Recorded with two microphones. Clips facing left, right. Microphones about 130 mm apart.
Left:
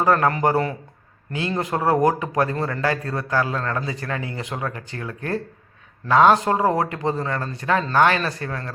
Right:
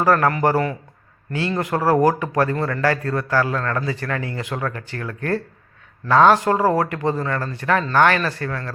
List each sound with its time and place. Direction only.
0.0 s a man's voice: 20° left (ahead or behind)